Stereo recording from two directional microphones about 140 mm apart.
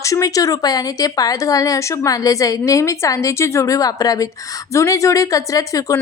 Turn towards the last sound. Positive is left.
turn(degrees=25)  # may be behind; listen again after turning